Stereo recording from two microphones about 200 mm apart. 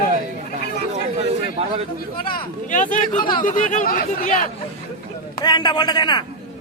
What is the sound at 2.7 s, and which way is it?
Speech, 40° left (ahead or behind).